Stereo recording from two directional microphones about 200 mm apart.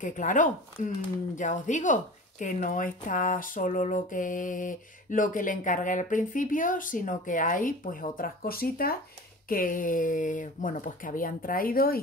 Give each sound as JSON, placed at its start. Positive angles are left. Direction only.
{"t": 0.0, "sound": "speech", "side_deg": 40}